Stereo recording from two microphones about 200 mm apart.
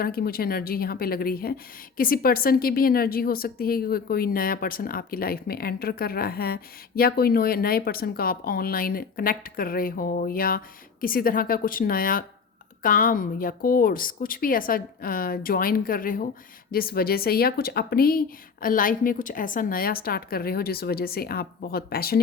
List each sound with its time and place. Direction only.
0.0 s a woman's voice: 50° left (ahead or behind)